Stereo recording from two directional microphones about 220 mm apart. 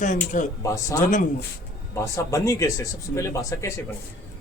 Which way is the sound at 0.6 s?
15° left (ahead or behind).